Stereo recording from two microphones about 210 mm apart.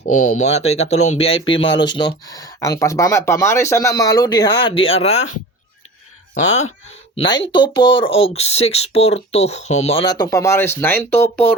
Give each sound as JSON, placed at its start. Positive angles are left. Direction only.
{"t": 0.0, "sound": "speech", "side_deg": 35}
{"t": 1.7, "sound": "speech", "side_deg": 55}
{"t": 2.2, "sound": "speech", "side_deg": 15}
{"t": 6.5, "sound": "speech", "side_deg": 35}
{"t": 7.2, "sound": "speech", "side_deg": 20}